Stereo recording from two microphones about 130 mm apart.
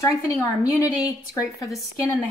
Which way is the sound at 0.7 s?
10° right (ahead or behind).